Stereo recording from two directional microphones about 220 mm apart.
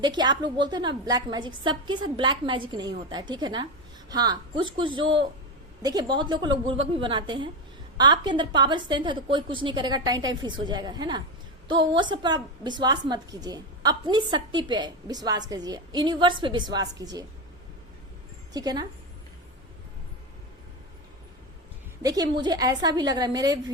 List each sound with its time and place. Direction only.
0.0 s a woman's voice: 20° right (ahead or behind)
18.5 s a woman's voice: 15° right (ahead or behind)
22.0 s a woman's voice: 15° right (ahead or behind)